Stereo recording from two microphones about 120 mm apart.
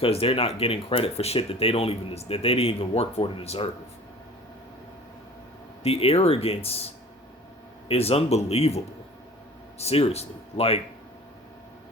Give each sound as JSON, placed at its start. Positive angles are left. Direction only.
{"t": 0.0, "sound": "speech", "side_deg": 50}
{"t": 5.8, "sound": "speech", "side_deg": 55}